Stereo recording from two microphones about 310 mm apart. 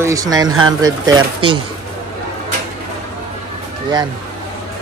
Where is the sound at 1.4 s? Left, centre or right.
Right.